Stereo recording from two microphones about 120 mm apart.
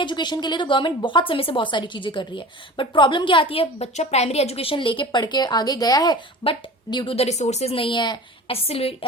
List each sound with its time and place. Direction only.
0.0 s a woman's voice: 40° left (ahead or behind)
3.9 s a woman's voice: 70° left (ahead or behind); by 6.1 s 30° left (ahead or behind)
6.4 s a woman's voice: 45° left (ahead or behind)
7.3 s a woman's voice: 70° left (ahead or behind); by 8.5 s 40° left (ahead or behind)
8.6 s a woman's voice: 55° left (ahead or behind)